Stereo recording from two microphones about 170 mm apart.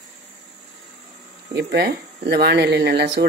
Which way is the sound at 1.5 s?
80° right.